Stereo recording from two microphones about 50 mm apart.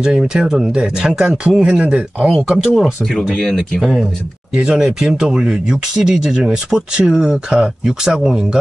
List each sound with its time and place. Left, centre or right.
0.0 s speech: centre
2.2 s speech: centre
2.7 s speech: centre
3.3 s speech: centre
3.8 s speech: centre